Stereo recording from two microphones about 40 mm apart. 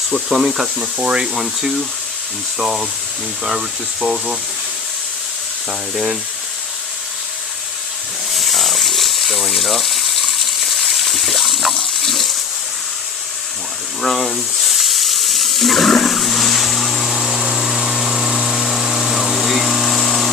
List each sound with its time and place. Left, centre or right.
0.1 s speech: centre
0.8 s speech: right
2.6 s speech: centre
4.0 s speech: centre
8.3 s water: centre
14.0 s a sound: centre